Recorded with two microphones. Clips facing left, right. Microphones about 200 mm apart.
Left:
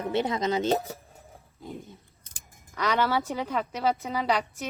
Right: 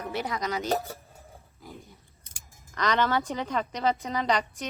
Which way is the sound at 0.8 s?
Centre (ahead or behind).